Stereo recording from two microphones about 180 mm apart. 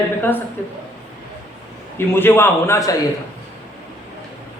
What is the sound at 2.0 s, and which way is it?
Speech, 10° left (ahead or behind).